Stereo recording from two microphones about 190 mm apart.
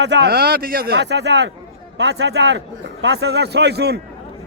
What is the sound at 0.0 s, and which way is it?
A man's voice, 65° right (ahead or behind).